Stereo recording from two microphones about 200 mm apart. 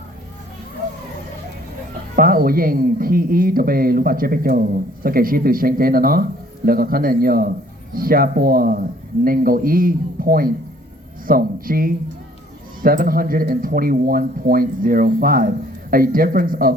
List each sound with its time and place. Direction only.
2.1 s speech: 45° right (ahead or behind)